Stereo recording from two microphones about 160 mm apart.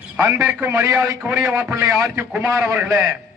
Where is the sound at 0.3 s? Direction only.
10° right (ahead or behind).